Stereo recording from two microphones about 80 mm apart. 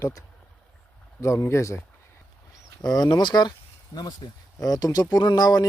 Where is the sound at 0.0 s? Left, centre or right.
Left.